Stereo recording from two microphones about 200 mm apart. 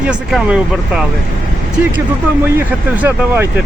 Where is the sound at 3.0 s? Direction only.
10° right (ahead or behind).